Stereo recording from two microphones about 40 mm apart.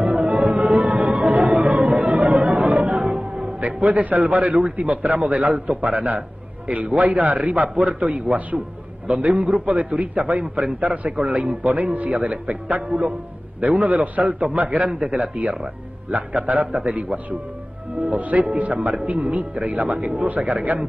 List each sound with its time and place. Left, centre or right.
0.0 s music: right
3.0 s music: right
3.6 s a man's voice: right